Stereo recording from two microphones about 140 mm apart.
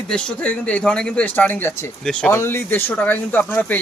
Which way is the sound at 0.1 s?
5° left (ahead or behind).